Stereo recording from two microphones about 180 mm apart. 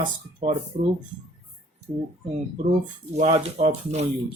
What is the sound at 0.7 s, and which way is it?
Speech, 40° right (ahead or behind).